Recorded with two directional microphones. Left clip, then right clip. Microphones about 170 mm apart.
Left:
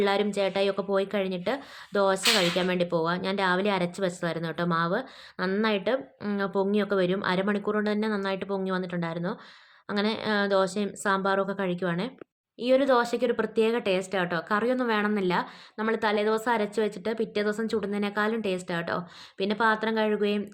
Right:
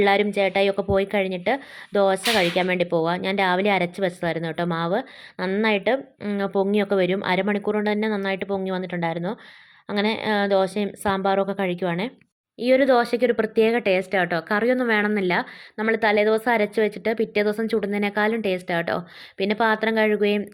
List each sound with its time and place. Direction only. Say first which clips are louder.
0.0 s a woman's voice: right 6 dB; 20° right (ahead or behind)